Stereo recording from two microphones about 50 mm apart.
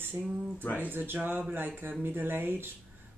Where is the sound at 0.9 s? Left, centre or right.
Right.